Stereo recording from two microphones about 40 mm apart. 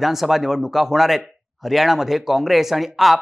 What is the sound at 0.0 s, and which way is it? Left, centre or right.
Speech, centre.